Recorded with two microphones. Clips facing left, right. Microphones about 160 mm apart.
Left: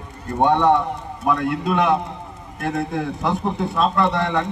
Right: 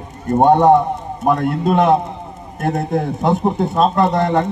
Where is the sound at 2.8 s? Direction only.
45° right (ahead or behind).